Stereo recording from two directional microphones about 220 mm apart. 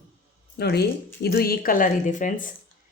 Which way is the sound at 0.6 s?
45° left (ahead or behind).